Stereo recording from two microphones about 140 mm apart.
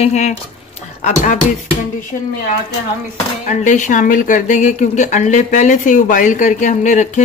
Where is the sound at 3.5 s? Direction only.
60° left (ahead or behind).